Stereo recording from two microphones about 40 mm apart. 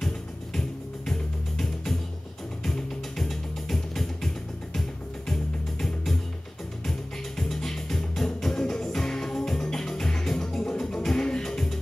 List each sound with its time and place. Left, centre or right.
0.0 s music: centre
5.3 s music: centre